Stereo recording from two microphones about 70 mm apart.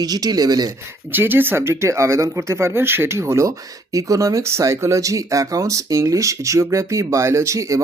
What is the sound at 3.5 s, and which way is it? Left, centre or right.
Speech, right.